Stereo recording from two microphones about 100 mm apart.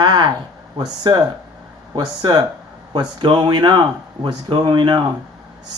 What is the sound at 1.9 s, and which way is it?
Speech, 50° right (ahead or behind).